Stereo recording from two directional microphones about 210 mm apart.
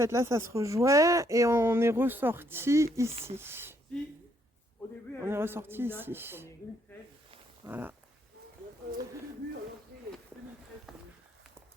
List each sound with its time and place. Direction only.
0.0 s speech: 15° right (ahead or behind)
5.2 s speech: 10° right (ahead or behind)
7.6 s dog: 10° right (ahead or behind)